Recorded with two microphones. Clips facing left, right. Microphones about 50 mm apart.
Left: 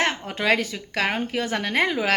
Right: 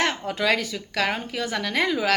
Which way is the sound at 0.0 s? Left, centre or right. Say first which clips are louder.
Even; left.